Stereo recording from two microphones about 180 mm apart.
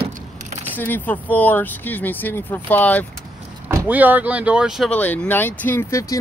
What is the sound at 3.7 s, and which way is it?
Speech, 10° right (ahead or behind).